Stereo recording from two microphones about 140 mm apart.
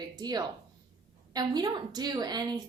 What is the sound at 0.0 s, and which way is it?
A woman's voice, 30° right (ahead or behind).